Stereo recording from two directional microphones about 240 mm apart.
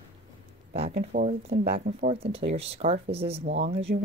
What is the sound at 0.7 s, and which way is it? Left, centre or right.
Speech, right.